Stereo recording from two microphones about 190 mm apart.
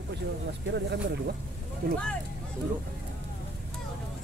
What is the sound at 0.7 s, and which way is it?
Speech, 65° right (ahead or behind).